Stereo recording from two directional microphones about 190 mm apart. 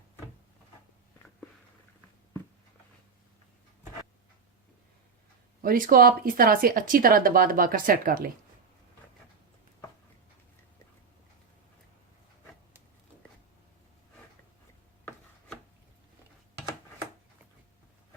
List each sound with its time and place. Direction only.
5.6 s speech: 50° right (ahead or behind)